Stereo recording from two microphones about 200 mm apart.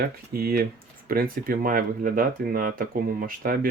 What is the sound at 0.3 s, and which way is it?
Speech, 50° right (ahead or behind).